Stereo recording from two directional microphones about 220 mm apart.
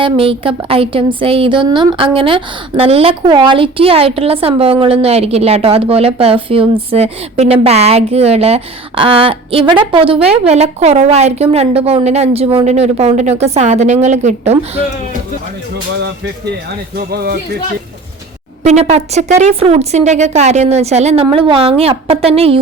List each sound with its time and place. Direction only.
0.0 s speech: 25° right (ahead or behind)
16.9 s speech: 45° right (ahead or behind)
18.6 s a woman's voice: 30° right (ahead or behind)